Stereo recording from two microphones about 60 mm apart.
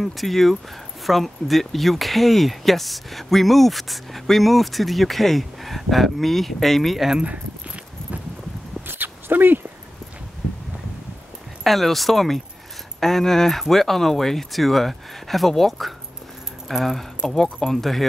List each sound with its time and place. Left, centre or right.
0.0 s speech: centre
7.2 s keys jangling: right
8.8 s zipper: right
11.6 s speech: centre